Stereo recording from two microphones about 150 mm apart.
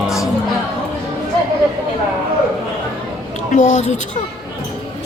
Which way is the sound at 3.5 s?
50° left (ahead or behind).